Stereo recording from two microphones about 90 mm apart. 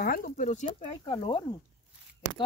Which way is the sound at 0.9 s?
75° left (ahead or behind).